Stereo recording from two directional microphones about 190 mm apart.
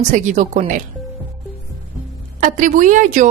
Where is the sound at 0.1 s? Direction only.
40° right (ahead or behind).